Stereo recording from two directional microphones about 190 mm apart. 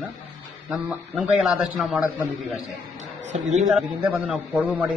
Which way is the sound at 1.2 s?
5° right (ahead or behind).